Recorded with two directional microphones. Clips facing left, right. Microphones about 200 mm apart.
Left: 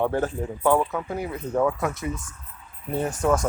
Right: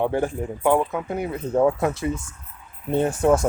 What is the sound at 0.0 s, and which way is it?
Speech, 15° right (ahead or behind).